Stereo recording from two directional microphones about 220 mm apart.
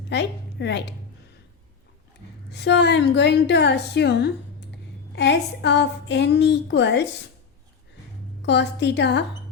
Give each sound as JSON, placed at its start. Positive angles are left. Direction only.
{"t": 0.1, "sound": "a woman's voice", "side_deg": 50}
{"t": 2.5, "sound": "a woman's voice", "side_deg": 50}
{"t": 4.7, "sound": "a sound", "side_deg": 50}
{"t": 8.4, "sound": "a woman's voice", "side_deg": 50}